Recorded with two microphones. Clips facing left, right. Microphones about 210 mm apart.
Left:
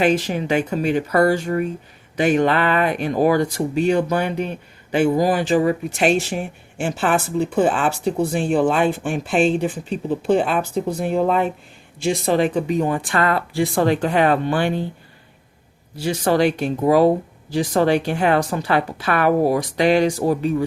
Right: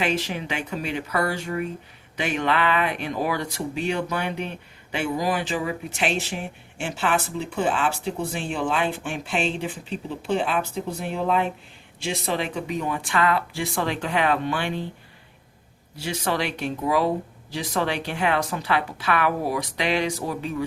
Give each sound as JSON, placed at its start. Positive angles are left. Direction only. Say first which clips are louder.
{"t": 0.0, "sound": "speech", "louder": "left 7 dB", "side_deg": 45}
{"t": 16.0, "sound": "speech", "louder": "left 9 dB", "side_deg": 40}